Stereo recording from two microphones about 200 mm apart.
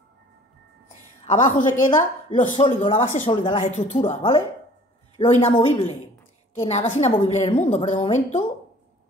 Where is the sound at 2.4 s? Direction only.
25° left (ahead or behind).